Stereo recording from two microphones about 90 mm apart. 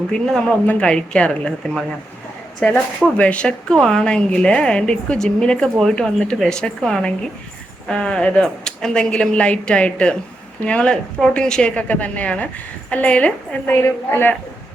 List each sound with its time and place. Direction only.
0.7 s speech: 10° left (ahead or behind)
13.8 s a woman's voice: 25° left (ahead or behind)